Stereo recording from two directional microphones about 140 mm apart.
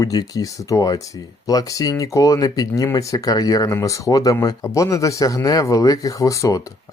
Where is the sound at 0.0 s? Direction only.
25° left (ahead or behind).